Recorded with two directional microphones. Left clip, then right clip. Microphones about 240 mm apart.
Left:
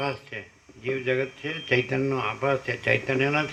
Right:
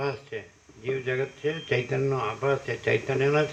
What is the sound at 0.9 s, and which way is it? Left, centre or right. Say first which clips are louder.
A man's voice: left 2 dB; left.